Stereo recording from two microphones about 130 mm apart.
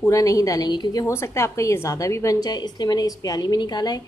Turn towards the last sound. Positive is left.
turn(degrees=30)  # may be behind; listen again after turning